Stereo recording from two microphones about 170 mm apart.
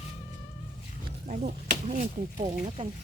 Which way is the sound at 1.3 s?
45° right (ahead or behind).